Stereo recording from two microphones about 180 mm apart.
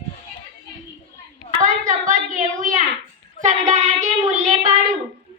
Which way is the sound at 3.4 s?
40° right (ahead or behind).